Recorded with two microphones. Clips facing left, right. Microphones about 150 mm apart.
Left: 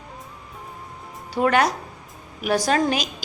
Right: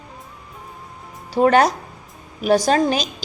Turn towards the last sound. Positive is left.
turn(degrees=-30)  # may be behind; listen again after turning